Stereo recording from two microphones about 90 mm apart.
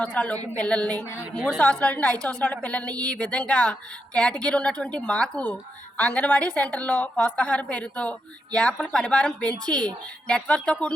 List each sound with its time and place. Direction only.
0.0 s a woman's voice: 15° left (ahead or behind)